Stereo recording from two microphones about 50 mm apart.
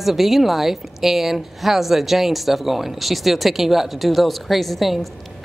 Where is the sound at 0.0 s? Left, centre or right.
Centre.